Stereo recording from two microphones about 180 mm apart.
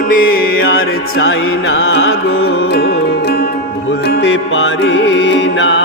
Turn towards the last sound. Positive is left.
turn(degrees=85)